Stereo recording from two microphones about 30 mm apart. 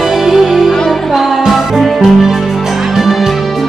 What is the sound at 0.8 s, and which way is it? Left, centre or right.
Music, centre.